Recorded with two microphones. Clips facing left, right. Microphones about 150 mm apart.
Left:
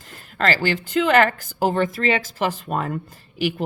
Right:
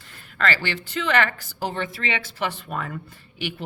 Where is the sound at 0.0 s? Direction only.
40° left (ahead or behind).